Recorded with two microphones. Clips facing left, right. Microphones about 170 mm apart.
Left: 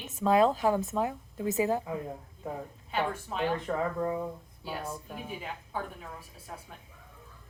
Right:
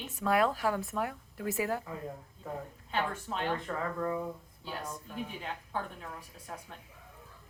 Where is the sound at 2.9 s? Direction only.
10° left (ahead or behind).